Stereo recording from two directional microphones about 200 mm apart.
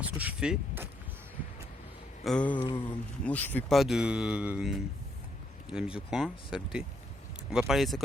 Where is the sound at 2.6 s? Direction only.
25° left (ahead or behind).